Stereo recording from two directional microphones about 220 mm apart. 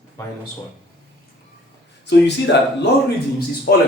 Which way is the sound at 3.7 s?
45° left (ahead or behind).